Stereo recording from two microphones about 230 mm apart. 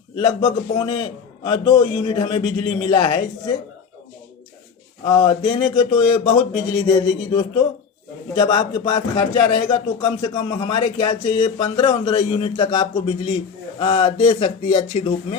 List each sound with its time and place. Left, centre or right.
0.2 s a man's voice: centre
5.0 s speech: centre